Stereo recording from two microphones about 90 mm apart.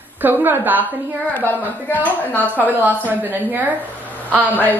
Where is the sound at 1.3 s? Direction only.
20° left (ahead or behind).